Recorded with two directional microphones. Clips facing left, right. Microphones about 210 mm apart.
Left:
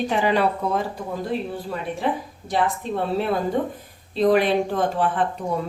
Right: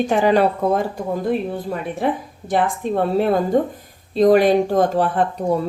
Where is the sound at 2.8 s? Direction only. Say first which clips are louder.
Right 5 dB; 50° right (ahead or behind).